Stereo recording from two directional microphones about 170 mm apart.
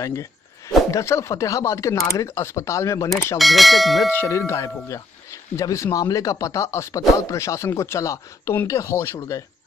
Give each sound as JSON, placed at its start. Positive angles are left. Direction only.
{"t": 0.0, "sound": "speech", "side_deg": 15}
{"t": 3.3, "sound": "speech", "side_deg": 0}
{"t": 4.1, "sound": "speech", "side_deg": 15}